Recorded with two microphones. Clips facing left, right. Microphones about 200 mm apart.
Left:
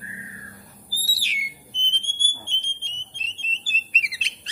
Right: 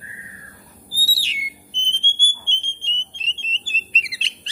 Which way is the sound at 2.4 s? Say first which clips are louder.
Right 3 dB; 25° right (ahead or behind).